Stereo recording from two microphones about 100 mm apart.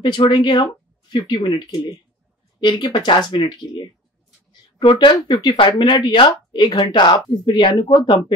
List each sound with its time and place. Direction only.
0.0 s speech: 50° left (ahead or behind)